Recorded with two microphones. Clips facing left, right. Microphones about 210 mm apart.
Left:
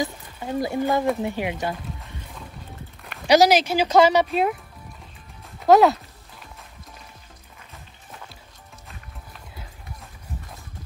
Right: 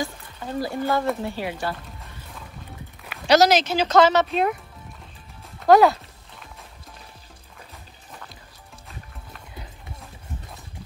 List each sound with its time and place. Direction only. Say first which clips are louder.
0.0 s speech: left 2 dB; 15° left (ahead or behind)
3.3 s speech: left 1 dB; 10° left (ahead or behind)
5.6 s speech: even; centre (ahead or behind)